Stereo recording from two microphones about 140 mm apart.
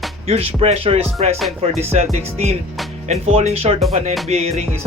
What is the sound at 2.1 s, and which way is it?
Music, 45° right (ahead or behind).